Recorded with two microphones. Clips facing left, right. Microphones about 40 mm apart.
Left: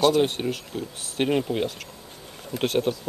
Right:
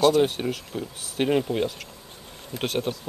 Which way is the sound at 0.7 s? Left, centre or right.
Centre.